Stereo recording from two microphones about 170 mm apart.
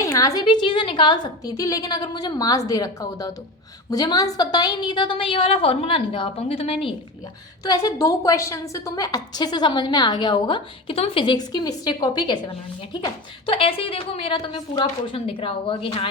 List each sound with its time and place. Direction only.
0.0 s a woman's voice: 20° left (ahead or behind); by 6.7 s 35° left (ahead or behind)
7.6 s a woman's voice: 20° left (ahead or behind)